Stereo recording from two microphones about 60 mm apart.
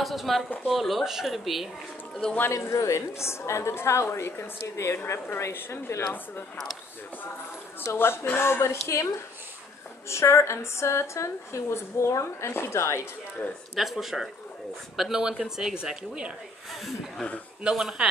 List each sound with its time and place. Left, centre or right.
0.0 s speech: centre
2.5 s a woman's voice: left
7.8 s a woman's voice: left
13.7 s speech: centre
17.6 s speech: centre